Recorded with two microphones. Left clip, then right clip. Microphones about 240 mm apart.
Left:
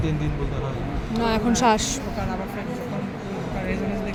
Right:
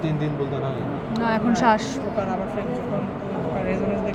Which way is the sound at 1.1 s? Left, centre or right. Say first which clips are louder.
Even; left.